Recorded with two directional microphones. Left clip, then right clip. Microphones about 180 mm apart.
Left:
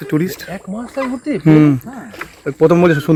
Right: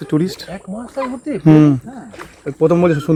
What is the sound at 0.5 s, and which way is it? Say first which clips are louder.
Speech: left 2 dB; 60° left (ahead or behind).